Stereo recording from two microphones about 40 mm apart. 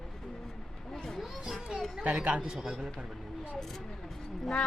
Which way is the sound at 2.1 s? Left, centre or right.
Right.